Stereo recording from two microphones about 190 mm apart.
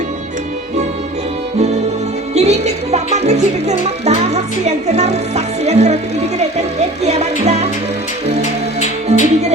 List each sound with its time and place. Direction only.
2.3 s music: 35° right (ahead or behind)
9.1 s music: 35° right (ahead or behind)